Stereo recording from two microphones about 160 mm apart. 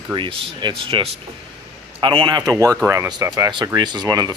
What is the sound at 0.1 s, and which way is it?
Speech, 30° right (ahead or behind).